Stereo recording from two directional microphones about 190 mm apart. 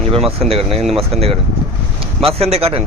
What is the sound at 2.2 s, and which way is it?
Speech, 30° right (ahead or behind).